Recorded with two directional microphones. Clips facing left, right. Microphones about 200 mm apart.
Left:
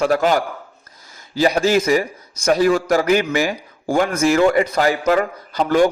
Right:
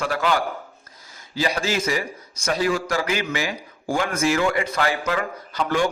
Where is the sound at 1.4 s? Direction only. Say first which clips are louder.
Left 8 dB; 40° left (ahead or behind).